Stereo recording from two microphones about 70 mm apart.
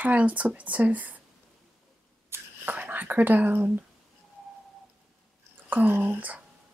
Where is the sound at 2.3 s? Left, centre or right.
Right.